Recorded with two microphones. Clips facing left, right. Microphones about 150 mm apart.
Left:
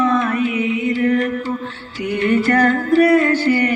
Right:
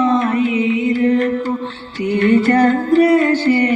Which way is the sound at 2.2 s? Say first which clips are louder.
Right 3 dB; 25° right (ahead or behind).